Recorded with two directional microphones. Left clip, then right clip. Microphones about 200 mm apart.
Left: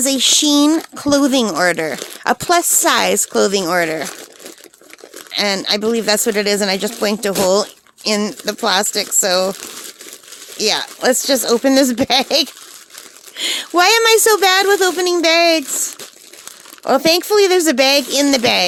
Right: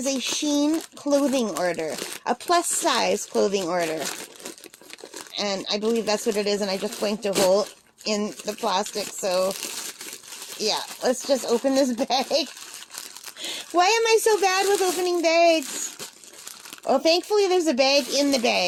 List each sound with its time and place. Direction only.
0.0 s speech: 50° left (ahead or behind)
5.3 s speech: 45° left (ahead or behind)
10.6 s speech: 45° left (ahead or behind)
16.8 s speech: 45° left (ahead or behind)